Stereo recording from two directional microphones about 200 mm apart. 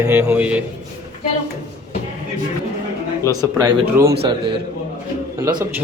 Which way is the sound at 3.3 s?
20° right (ahead or behind).